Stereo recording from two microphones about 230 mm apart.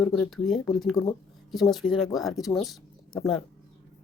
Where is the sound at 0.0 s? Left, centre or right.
Centre.